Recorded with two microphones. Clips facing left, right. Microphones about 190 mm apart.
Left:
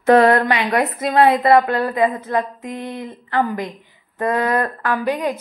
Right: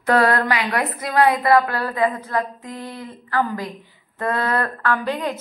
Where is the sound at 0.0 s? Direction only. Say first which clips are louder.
Left 5 dB; 25° left (ahead or behind).